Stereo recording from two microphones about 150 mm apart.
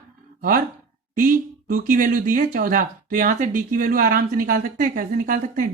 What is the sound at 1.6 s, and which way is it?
Speech, 60° right (ahead or behind).